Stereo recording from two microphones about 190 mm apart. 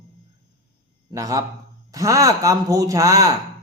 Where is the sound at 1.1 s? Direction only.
20° right (ahead or behind).